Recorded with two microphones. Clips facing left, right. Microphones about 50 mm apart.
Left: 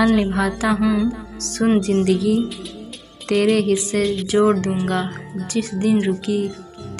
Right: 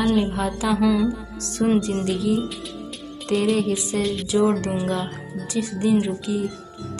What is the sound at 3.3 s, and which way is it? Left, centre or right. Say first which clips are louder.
Speech: left 4 dB; left.